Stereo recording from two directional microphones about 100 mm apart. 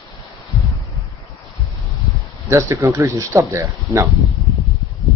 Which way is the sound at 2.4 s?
30° right (ahead or behind).